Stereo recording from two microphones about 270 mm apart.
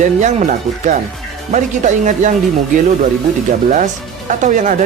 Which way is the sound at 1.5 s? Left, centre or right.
Right.